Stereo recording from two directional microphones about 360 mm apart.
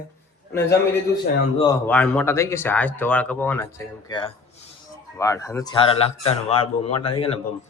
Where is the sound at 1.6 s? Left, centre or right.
Centre.